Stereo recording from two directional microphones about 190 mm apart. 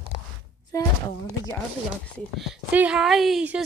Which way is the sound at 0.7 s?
15° left (ahead or behind).